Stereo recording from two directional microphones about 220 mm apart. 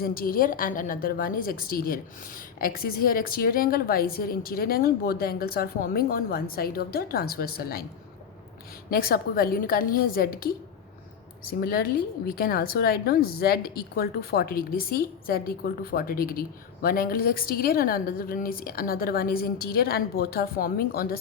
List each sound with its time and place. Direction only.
0.0 s a woman's voice: 40° left (ahead or behind)
8.9 s a woman's voice: 40° left (ahead or behind)
11.6 s a woman's voice: 40° left (ahead or behind)